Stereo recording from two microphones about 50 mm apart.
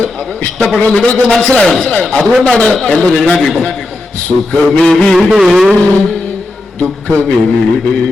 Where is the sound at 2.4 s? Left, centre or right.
Centre.